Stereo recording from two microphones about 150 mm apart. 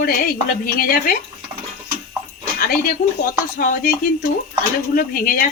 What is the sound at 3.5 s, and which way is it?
A woman's voice, 70° left (ahead or behind).